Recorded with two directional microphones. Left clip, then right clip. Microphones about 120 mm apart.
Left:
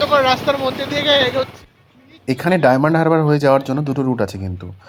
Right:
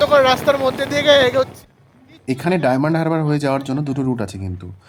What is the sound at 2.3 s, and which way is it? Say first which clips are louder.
Speech: left 4 dB; 15° left (ahead or behind).